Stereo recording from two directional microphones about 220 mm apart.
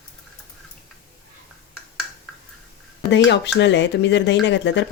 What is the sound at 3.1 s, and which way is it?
Speech, 55° left (ahead or behind).